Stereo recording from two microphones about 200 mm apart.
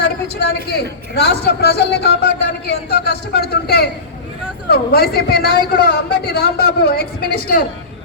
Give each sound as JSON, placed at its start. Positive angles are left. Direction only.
{"t": 0.0, "sound": "a man's voice", "side_deg": 55}